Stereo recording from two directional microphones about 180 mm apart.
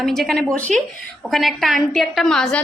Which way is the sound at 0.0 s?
Centre (ahead or behind).